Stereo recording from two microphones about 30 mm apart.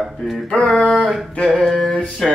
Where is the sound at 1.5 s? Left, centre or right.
Centre.